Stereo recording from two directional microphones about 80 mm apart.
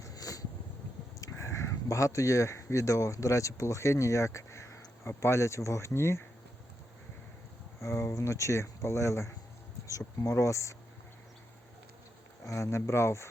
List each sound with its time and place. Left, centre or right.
0.0 s a sound: left
1.2 s speech: left
7.8 s speech: left
12.5 s speech: left